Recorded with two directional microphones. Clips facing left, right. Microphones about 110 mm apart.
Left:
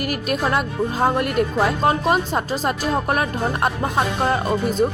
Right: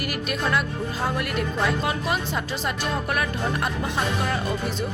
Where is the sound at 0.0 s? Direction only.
45° left (ahead or behind).